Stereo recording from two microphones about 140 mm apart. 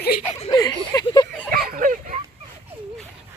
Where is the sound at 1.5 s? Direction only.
90° right; by 2.2 s 75° right (ahead or behind).